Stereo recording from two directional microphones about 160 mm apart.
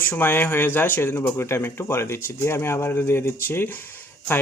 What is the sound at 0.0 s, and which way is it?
Speech, 15° left (ahead or behind).